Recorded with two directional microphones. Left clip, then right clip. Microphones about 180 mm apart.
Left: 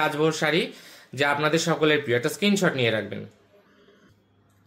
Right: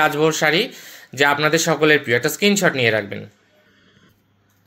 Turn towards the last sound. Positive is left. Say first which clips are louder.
# right 6 dB
turn(degrees=-25)  # may be behind; listen again after turning